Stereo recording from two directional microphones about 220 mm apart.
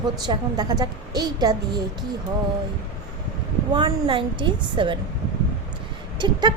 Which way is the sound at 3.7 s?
20° right (ahead or behind).